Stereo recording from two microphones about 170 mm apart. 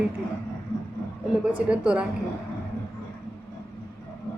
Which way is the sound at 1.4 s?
5° right (ahead or behind).